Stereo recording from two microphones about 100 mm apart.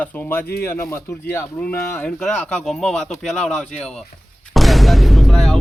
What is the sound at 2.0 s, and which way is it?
Speech, 10° left (ahead or behind).